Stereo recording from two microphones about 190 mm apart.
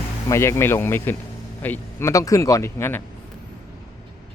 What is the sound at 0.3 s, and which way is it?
Speech, 15° left (ahead or behind).